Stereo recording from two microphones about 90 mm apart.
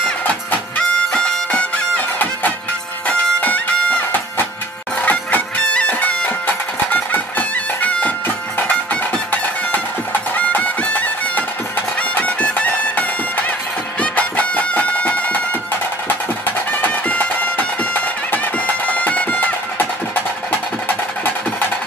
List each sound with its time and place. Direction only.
0.0 s music: 15° left (ahead or behind)
5.0 s music: 15° left (ahead or behind)
16.7 s music: 20° left (ahead or behind)